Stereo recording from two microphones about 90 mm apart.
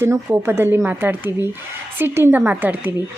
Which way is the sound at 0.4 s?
25° right (ahead or behind).